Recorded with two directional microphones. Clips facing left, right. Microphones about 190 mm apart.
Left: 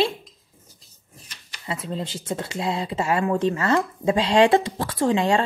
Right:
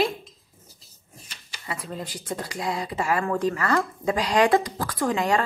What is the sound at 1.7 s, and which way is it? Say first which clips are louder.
Speech: left 4 dB; 25° left (ahead or behind).